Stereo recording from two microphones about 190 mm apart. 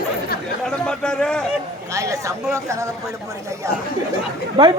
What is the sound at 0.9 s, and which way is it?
Speech, 5° left (ahead or behind).